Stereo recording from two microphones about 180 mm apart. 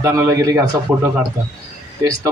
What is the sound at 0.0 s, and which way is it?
A man's voice, 15° right (ahead or behind).